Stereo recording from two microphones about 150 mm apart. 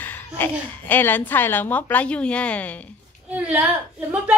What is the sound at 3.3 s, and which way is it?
A woman's voice, 10° right (ahead or behind).